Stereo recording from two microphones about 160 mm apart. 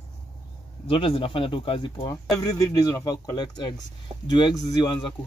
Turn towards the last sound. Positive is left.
turn(degrees=25)  # may be behind; listen again after turning